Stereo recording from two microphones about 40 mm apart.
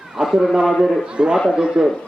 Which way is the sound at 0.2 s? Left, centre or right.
Right.